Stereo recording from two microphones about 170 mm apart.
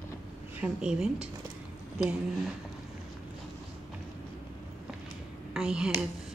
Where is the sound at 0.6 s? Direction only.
5° right (ahead or behind).